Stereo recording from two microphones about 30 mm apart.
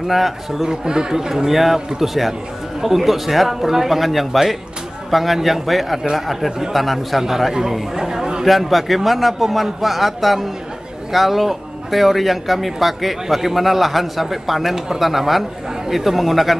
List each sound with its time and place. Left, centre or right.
0.0 s speech: centre
0.7 s a man's voice: right
8.5 s a man's voice: centre